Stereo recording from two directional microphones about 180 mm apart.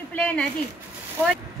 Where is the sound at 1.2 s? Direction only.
15° right (ahead or behind).